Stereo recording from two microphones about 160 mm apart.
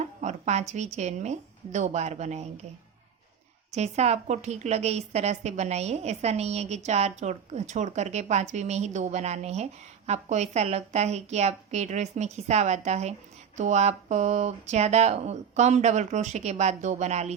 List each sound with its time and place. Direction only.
0.0 s a sound: 45° right (ahead or behind)
0.9 s a woman's voice: 45° right (ahead or behind)
3.8 s a woman's voice: 45° right (ahead or behind)